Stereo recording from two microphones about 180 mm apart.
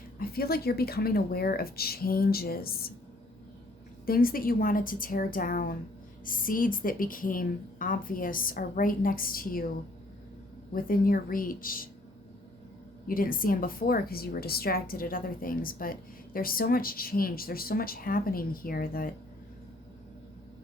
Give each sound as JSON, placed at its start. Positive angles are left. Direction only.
{"t": 0.2, "sound": "speech", "side_deg": 55}
{"t": 4.0, "sound": "speech", "side_deg": 55}
{"t": 10.8, "sound": "speech", "side_deg": 55}
{"t": 13.1, "sound": "speech", "side_deg": 50}